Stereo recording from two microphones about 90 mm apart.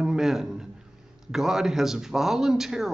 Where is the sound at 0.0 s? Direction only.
5° right (ahead or behind).